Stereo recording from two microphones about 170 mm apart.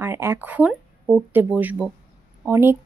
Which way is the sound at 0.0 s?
15° right (ahead or behind).